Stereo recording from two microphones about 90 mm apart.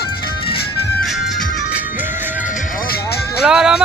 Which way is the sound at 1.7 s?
20° right (ahead or behind).